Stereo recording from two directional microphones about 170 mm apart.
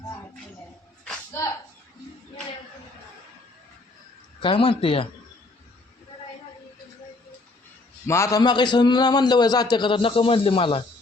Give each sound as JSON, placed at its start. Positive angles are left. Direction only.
{"t": 1.0, "sound": "a sound", "side_deg": 15}
{"t": 4.4, "sound": "speech", "side_deg": 30}
{"t": 8.0, "sound": "a man's voice", "side_deg": 15}